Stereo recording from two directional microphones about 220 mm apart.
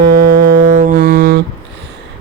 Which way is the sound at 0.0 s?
45° right (ahead or behind).